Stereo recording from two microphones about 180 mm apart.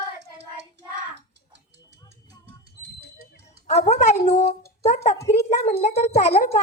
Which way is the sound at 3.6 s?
40° left (ahead or behind).